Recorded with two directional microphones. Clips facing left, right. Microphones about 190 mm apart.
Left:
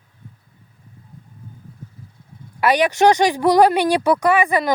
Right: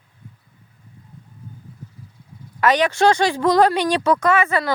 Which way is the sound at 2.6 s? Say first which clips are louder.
Left 1 dB; 10° left (ahead or behind).